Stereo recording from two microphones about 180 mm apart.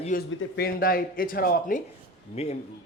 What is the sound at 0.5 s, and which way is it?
A man's voice, 60° left (ahead or behind).